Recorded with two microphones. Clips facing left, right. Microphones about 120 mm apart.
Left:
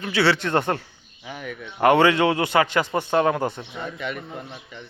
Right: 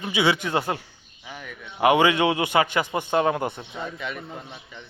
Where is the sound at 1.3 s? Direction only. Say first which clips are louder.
Left 5 dB; 5° left (ahead or behind).